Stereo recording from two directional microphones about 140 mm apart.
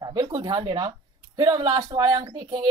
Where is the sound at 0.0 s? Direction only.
30° right (ahead or behind).